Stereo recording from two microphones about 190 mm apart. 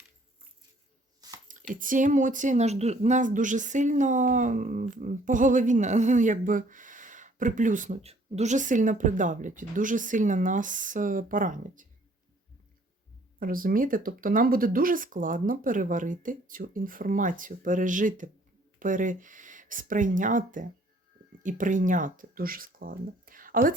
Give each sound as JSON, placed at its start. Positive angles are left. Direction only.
{"t": 1.7, "sound": "speech", "side_deg": -45}
{"t": 13.4, "sound": "speech", "side_deg": -45}